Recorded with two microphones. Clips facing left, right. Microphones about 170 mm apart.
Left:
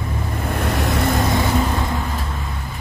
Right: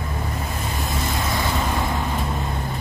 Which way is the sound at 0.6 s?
75° left (ahead or behind).